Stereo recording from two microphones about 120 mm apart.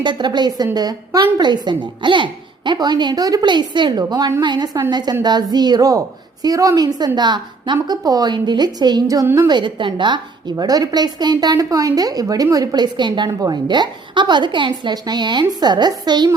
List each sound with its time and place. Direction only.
0.0 s speech: 40° right (ahead or behind)